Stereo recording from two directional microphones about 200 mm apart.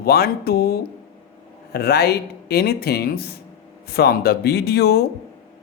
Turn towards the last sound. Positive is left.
turn(degrees=50)  # may be behind; listen again after turning